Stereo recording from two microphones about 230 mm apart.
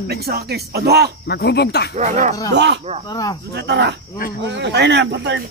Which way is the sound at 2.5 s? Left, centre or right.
Right.